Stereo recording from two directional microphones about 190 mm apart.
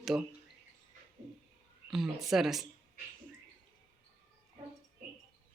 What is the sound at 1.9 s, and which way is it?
Speech, centre (ahead or behind).